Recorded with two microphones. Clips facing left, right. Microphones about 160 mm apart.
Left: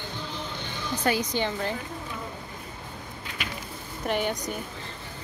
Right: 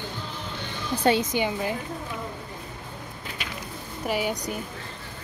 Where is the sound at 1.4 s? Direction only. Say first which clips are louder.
Right 2 dB; 10° right (ahead or behind).